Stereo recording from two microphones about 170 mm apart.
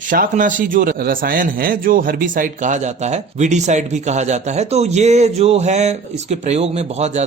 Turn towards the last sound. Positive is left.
turn(degrees=-40)  # may be behind; listen again after turning